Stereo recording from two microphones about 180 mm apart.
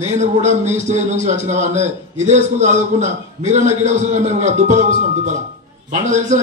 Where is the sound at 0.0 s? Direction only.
40° right (ahead or behind).